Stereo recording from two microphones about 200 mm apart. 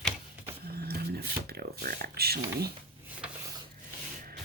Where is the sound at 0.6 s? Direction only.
50° right (ahead or behind).